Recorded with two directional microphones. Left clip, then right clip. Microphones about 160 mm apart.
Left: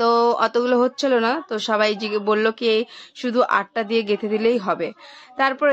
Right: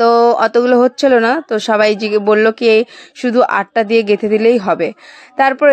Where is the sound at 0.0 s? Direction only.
35° right (ahead or behind).